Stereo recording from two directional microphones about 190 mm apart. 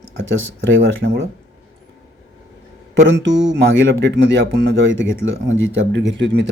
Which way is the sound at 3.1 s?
70° right (ahead or behind).